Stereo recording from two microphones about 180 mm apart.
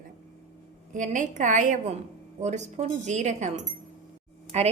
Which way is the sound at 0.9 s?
45° right (ahead or behind).